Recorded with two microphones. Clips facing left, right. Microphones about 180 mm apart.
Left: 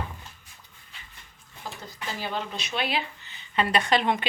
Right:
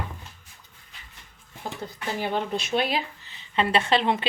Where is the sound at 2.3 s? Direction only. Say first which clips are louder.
Right 7 dB; 50° right (ahead or behind); by 4.2 s 30° right (ahead or behind).